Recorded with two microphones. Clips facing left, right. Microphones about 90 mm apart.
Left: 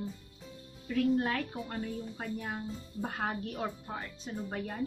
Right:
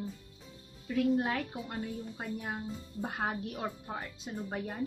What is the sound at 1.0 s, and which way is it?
Speech, 10° right (ahead or behind).